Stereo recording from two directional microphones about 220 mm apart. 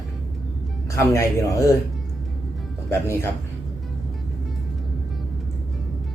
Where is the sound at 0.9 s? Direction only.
15° left (ahead or behind).